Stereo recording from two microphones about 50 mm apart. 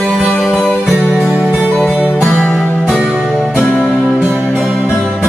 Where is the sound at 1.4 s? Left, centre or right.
Centre.